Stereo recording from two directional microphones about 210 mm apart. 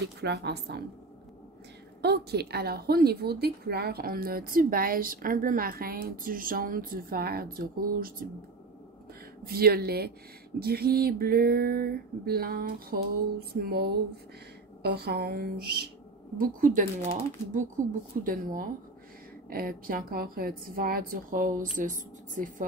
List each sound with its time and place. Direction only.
0.0 s a woman's voice: 55° right (ahead or behind)
2.0 s a woman's voice: 50° right (ahead or behind)
9.4 s a woman's voice: 45° right (ahead or behind)